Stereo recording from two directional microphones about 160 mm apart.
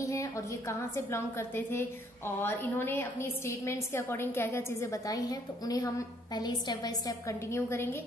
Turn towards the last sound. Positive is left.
turn(degrees=15)  # may be behind; listen again after turning